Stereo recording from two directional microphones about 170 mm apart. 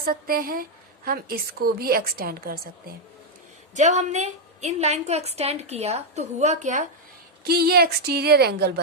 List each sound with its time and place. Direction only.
0.0 s a woman's voice: 60° right (ahead or behind)
3.8 s a woman's voice: 40° right (ahead or behind)
7.4 s speech: 65° right (ahead or behind)